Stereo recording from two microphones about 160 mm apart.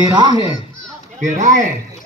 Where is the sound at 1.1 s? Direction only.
50° right (ahead or behind).